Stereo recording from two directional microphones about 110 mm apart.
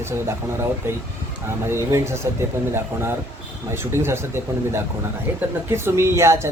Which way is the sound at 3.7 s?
20° right (ahead or behind).